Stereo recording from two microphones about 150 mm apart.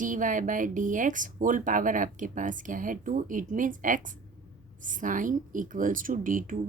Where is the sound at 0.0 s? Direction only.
60° right (ahead or behind).